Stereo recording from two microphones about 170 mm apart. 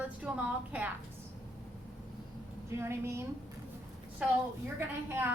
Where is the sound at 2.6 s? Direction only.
15° right (ahead or behind).